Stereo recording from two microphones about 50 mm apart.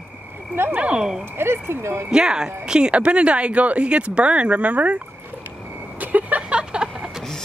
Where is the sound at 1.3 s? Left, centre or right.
Right.